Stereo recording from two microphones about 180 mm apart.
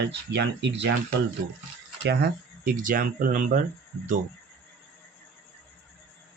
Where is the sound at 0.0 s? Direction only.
70° right (ahead or behind).